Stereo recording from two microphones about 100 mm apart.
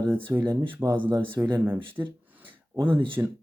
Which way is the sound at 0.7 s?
20° right (ahead or behind).